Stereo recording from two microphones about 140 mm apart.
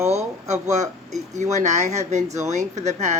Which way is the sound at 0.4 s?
55° right (ahead or behind).